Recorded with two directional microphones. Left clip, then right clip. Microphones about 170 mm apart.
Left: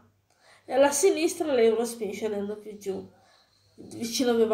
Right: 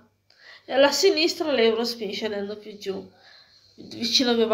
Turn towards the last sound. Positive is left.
turn(degrees=15)  # may be behind; listen again after turning